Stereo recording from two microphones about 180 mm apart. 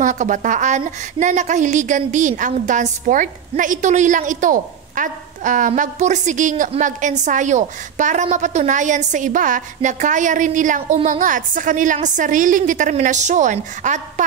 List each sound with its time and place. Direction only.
0.0 s a woman's voice: 45° right (ahead or behind)